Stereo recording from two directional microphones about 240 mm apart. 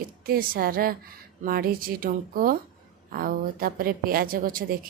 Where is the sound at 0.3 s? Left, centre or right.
Right.